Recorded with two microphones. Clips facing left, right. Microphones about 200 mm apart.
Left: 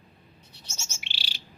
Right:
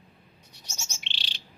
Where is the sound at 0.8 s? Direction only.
10° left (ahead or behind).